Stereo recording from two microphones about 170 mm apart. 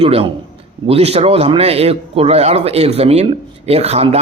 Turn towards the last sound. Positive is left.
turn(degrees=-35)  # may be behind; listen again after turning